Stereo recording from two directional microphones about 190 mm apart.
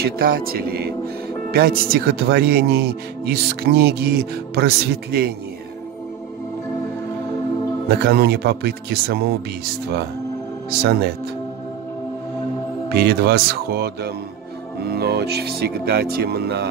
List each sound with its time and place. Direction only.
0.0 s speech: 50° right (ahead or behind)
8.0 s speech: 55° right (ahead or behind)
10.8 s speech: 55° right (ahead or behind)
12.9 s speech: 55° right (ahead or behind)